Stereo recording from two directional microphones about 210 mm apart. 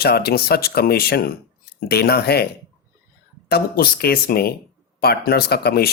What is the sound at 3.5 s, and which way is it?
Speech, 45° left (ahead or behind).